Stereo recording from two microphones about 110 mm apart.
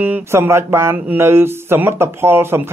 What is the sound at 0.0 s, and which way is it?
A man's voice, 20° right (ahead or behind).